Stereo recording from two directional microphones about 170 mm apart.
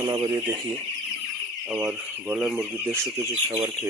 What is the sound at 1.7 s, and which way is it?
Speech, 10° right (ahead or behind).